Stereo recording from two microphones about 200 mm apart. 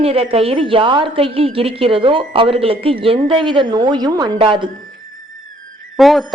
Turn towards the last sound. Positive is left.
turn(degrees=0)  # may be behind; listen again after turning